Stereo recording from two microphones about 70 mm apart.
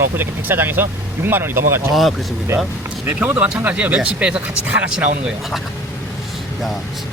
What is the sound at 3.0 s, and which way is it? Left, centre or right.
Speech, right.